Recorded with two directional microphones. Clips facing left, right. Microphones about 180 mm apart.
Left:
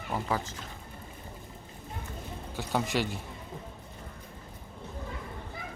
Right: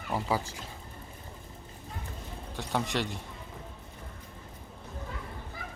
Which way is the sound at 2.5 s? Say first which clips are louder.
Left 1 dB; centre (ahead or behind).